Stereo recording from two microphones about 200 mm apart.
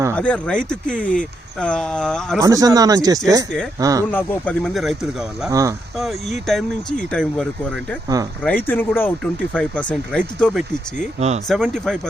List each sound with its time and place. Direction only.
0.2 s speech: 5° left (ahead or behind)
2.4 s speech: 15° right (ahead or behind)
4.1 s speech: 10° left (ahead or behind)
5.5 s speech: 15° right (ahead or behind)
6.0 s speech: centre (ahead or behind)
8.0 s speech: 20° right (ahead or behind)
8.4 s speech: 10° left (ahead or behind)